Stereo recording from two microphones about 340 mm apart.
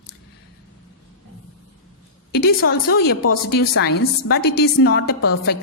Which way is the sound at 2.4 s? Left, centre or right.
Left.